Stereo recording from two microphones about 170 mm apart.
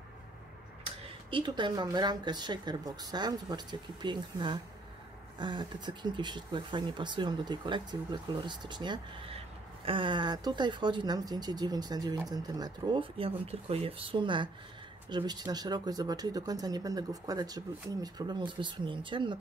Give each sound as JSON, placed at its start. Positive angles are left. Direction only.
{"t": 0.8, "sound": "speech", "side_deg": -30}